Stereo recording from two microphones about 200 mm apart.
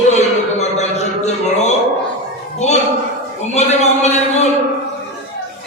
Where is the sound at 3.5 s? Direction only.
35° left (ahead or behind).